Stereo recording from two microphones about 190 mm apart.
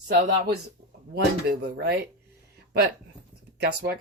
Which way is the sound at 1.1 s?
55° right (ahead or behind).